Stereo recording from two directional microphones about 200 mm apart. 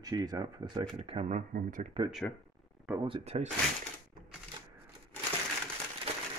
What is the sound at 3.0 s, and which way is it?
Speech, 30° right (ahead or behind).